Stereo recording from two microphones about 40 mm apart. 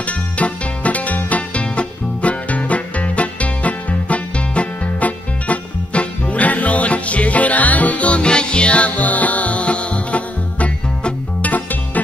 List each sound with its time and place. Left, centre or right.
0.0 s music: left